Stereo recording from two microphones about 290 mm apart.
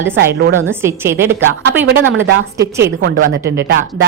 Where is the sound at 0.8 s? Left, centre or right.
Centre.